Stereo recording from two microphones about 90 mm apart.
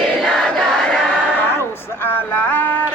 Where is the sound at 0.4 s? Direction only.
10° left (ahead or behind).